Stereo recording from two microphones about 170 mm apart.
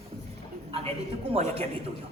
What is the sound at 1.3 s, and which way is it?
Speech, 35° right (ahead or behind).